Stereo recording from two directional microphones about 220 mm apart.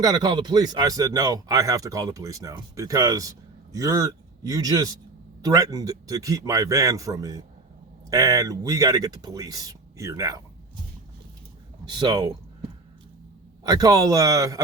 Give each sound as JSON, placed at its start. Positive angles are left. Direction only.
{"t": 0.0, "sound": "speech", "side_deg": -20}
{"t": 11.9, "sound": "speech", "side_deg": -20}
{"t": 13.7, "sound": "speech", "side_deg": -15}